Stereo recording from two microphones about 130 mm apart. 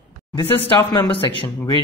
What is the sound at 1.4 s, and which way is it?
Speech, 25° left (ahead or behind).